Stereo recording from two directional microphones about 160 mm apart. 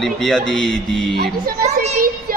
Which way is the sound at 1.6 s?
45° right (ahead or behind).